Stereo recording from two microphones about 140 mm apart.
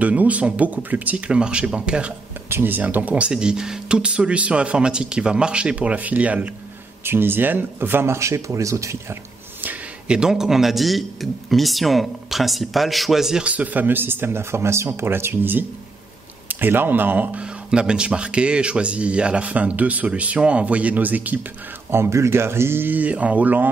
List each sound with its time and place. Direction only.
0.0 s speech: 10° right (ahead or behind)
9.6 s a man's voice: 10° right (ahead or behind)